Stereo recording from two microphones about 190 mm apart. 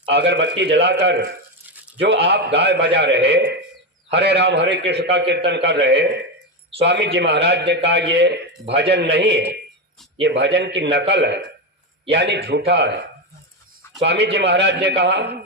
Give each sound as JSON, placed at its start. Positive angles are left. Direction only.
{"t": 0.1, "sound": "a man's voice", "side_deg": -65}
{"t": 14.0, "sound": "a man's voice", "side_deg": -65}